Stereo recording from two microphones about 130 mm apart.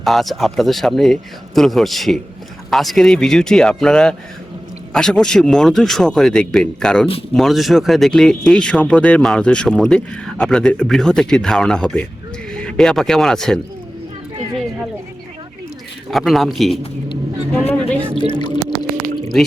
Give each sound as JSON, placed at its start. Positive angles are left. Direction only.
{"t": 0.0, "sound": "speech", "side_deg": 0}
{"t": 16.0, "sound": "speech", "side_deg": 0}
{"t": 17.7, "sound": "speech", "side_deg": 10}
{"t": 18.2, "sound": "speech", "side_deg": 35}